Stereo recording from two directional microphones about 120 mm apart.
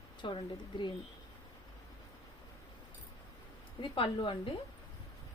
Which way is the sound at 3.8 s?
45° left (ahead or behind).